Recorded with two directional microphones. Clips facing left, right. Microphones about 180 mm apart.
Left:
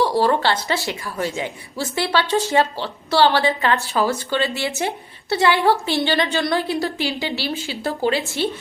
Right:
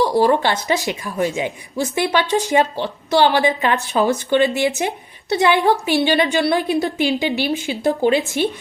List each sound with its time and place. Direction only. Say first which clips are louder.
0.0 s a woman's voice: right 2 dB; 15° right (ahead or behind)